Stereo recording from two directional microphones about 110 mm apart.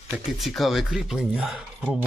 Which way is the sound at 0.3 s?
Centre (ahead or behind).